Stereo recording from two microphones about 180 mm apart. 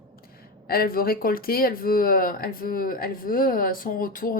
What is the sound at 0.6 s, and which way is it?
A woman's voice, 55° left (ahead or behind).